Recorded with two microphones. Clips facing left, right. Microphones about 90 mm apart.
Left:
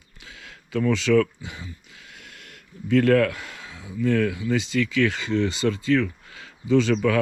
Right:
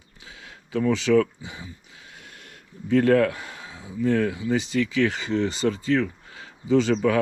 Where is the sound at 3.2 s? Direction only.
70° left (ahead or behind).